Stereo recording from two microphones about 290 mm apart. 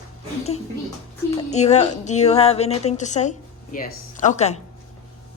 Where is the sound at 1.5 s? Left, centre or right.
Left.